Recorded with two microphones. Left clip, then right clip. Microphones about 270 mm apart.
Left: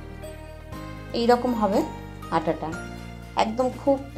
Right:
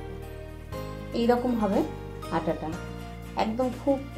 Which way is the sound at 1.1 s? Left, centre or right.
Left.